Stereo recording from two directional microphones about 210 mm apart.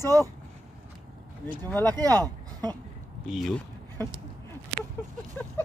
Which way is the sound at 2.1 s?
20° right (ahead or behind).